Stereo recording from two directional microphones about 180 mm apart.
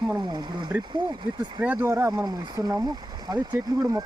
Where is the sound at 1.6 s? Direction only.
10° right (ahead or behind).